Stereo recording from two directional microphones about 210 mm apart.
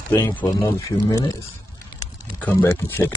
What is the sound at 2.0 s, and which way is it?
Typing, 10° left (ahead or behind).